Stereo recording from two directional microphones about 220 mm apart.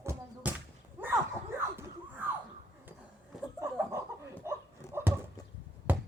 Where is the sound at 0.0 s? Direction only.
10° right (ahead or behind).